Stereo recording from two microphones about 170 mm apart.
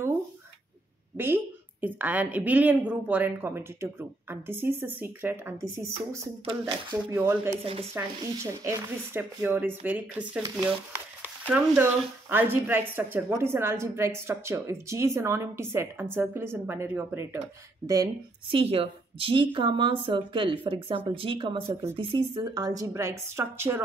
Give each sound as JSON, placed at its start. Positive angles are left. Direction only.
{"t": 1.1, "sound": "a woman's voice", "side_deg": -10}
{"t": 18.5, "sound": "a woman's voice", "side_deg": -35}